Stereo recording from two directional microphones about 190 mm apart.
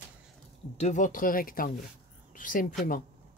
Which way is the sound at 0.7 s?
40° left (ahead or behind).